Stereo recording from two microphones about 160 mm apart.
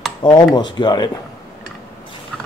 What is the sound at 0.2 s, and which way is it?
Speech, 30° left (ahead or behind).